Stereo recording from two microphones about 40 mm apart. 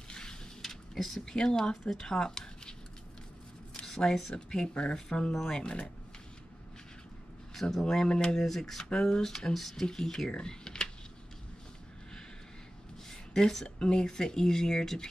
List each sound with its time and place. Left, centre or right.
0.1 s a sound: centre
0.6 s a sound: centre
1.2 s speech: centre
3.8 s speech: centre
7.8 s speech: centre
8.4 s speech: centre
10.3 s typing: centre
13.1 s a sound: centre
13.7 s speech: centre